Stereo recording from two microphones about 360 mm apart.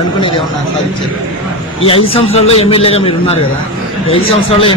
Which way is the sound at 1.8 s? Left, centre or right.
Centre.